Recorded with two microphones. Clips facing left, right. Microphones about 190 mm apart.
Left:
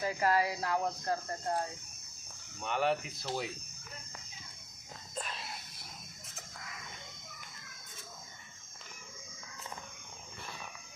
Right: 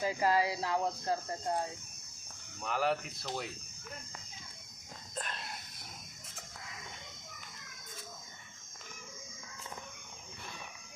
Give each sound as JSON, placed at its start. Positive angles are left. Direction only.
{"t": 0.0, "sound": "speech", "side_deg": -15}
{"t": 2.6, "sound": "speech", "side_deg": 0}
{"t": 5.1, "sound": "whispering", "side_deg": 0}